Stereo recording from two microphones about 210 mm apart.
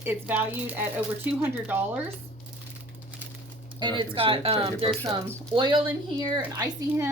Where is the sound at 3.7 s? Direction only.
20° right (ahead or behind).